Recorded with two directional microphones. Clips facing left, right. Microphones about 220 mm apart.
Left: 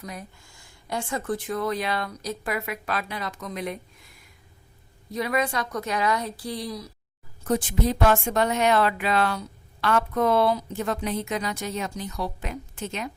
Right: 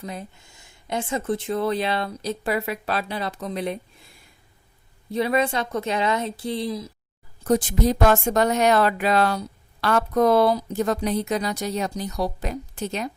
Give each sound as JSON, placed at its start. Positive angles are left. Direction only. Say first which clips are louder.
{"t": 0.0, "sound": "speech", "louder": "right 4 dB", "side_deg": -25}
{"t": 5.1, "sound": "speech", "louder": "right 4 dB", "side_deg": -30}
{"t": 7.4, "sound": "a woman's voice", "louder": "right 4 dB", "side_deg": -40}